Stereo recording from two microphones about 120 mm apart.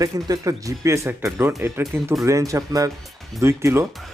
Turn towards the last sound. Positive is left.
turn(degrees=-20)  # may be behind; listen again after turning